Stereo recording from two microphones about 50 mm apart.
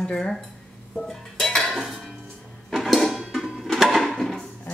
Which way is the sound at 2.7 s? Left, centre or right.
Centre.